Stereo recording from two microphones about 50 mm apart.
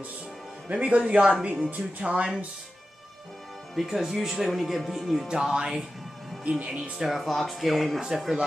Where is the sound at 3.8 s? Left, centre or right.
Centre.